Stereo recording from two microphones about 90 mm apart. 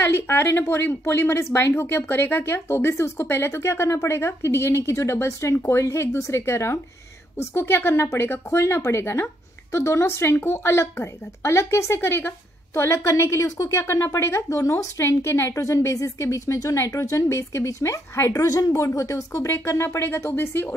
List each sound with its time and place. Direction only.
0.0 s speech: 25° left (ahead or behind)